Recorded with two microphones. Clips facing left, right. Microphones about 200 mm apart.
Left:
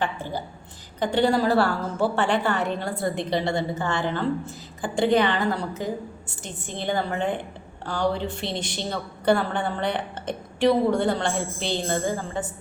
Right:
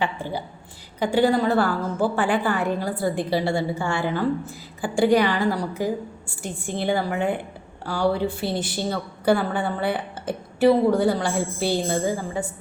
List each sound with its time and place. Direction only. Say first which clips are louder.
0.0 s a woman's voice: right 1 dB; 10° right (ahead or behind)
3.5 s a woman's voice: right 2 dB; 20° left (ahead or behind)
3.8 s a woman's voice: right 2 dB; 10° right (ahead or behind)